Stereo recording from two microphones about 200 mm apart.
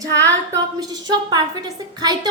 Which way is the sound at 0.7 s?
20° right (ahead or behind).